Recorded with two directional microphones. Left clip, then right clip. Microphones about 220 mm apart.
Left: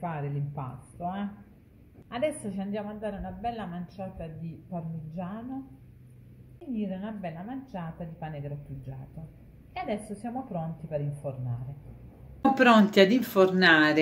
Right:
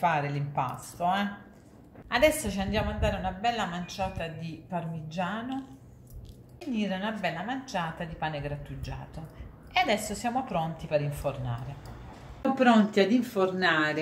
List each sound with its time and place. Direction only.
0.0 s a woman's voice: 10° left (ahead or behind)
6.7 s a woman's voice: 10° left (ahead or behind)
9.8 s a woman's voice: 5° left (ahead or behind)
12.5 s speech: 35° left (ahead or behind)